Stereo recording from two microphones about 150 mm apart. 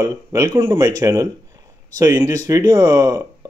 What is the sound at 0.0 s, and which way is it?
Speech, 20° right (ahead or behind).